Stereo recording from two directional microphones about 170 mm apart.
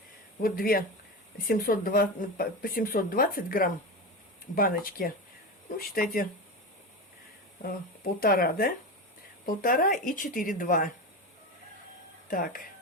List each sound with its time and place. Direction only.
0.4 s speech: 60° left (ahead or behind)
7.6 s speech: 60° left (ahead or behind)
12.3 s speech: 55° left (ahead or behind)